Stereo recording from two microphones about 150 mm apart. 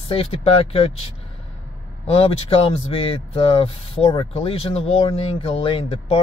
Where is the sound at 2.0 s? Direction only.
40° left (ahead or behind).